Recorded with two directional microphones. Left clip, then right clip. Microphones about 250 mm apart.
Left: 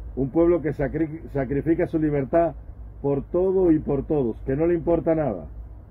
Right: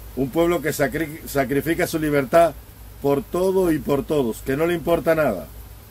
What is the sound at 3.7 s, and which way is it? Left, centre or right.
Speech, centre.